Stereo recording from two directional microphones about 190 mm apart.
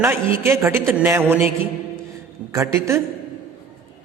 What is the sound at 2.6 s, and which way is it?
Speech, 15° right (ahead or behind).